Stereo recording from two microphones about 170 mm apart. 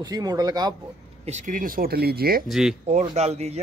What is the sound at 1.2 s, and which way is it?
Speech, 45° right (ahead or behind).